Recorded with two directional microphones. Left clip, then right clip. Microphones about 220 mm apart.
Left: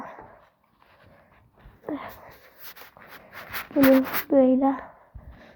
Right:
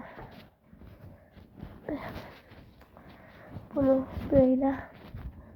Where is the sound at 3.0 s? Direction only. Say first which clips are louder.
Left 5 dB; 40° left (ahead or behind).